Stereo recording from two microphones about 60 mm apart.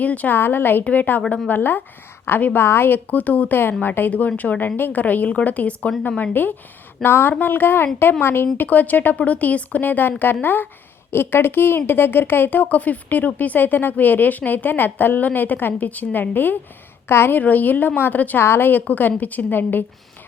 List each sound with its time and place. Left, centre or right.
0.0 s a woman's voice: left
0.3 s a woman's voice: left; by 6.3 s centre
7.0 s speech: left
8.5 s a woman's voice: left
17.4 s speech: left